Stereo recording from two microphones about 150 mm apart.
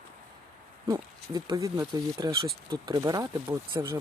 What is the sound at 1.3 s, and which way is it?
Speech, 25° right (ahead or behind).